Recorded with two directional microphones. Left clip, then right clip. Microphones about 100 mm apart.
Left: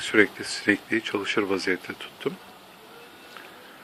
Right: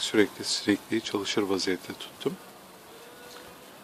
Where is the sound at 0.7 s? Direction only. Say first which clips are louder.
Left 6 dB; 25° right (ahead or behind).